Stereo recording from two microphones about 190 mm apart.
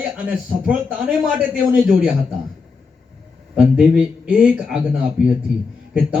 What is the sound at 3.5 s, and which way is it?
A man's voice, 5° right (ahead or behind).